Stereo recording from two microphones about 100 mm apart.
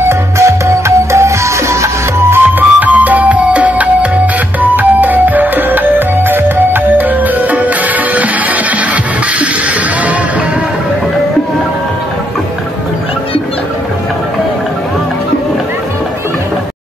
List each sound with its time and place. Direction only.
0.0 s music: 25° right (ahead or behind)